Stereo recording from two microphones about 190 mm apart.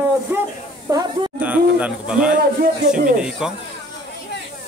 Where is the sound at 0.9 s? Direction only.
20° right (ahead or behind).